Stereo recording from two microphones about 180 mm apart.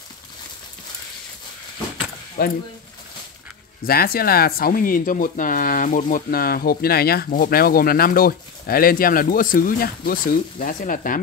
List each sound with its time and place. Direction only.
2.4 s speech: 55° left (ahead or behind)
3.8 s speech: 55° left (ahead or behind)